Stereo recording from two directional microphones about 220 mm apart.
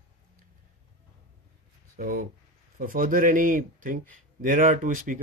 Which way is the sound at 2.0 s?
40° right (ahead or behind).